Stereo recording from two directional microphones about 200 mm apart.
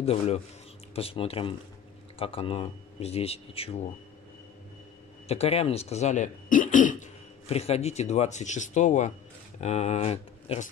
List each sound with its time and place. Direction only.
0.0 s speech: 30° left (ahead or behind)
5.3 s speech: 30° left (ahead or behind)